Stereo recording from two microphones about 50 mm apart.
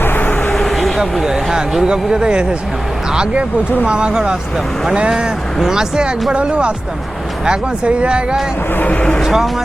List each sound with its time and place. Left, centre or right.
0.0 s vehicle: left
0.7 s vehicle: centre
1.2 s speech: centre
8.9 s speech: left
9.2 s speech: centre